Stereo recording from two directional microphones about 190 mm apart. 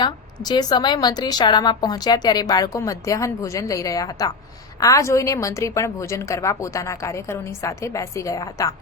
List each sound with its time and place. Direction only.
0.0 s a woman's voice: 20° left (ahead or behind)